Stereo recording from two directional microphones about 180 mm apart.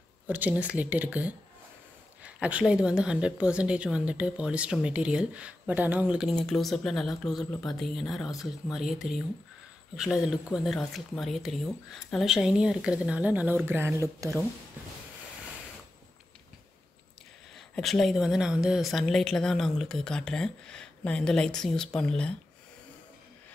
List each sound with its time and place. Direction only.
0.3 s speech: 10° right (ahead or behind)
17.6 s speech: centre (ahead or behind)